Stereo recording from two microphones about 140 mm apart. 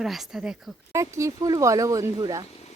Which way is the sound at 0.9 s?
20° right (ahead or behind).